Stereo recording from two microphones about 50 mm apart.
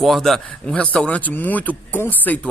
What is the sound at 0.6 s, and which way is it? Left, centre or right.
Speech, left.